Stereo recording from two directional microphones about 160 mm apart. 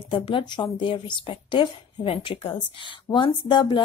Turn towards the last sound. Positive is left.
turn(degrees=30)  # may be behind; listen again after turning